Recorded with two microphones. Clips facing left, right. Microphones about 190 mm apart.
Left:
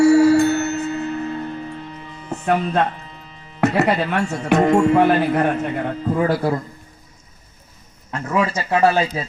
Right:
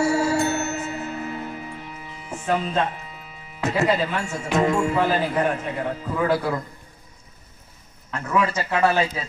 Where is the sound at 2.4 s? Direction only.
60° left (ahead or behind).